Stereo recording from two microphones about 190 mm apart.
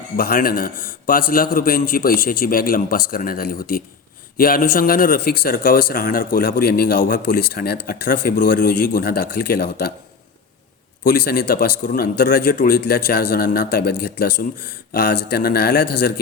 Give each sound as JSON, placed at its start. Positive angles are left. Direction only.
{"t": 0.2, "sound": "speech", "side_deg": 50}
{"t": 11.0, "sound": "speech", "side_deg": 45}